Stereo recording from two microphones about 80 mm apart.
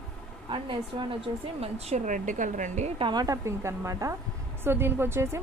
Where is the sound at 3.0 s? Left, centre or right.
Right.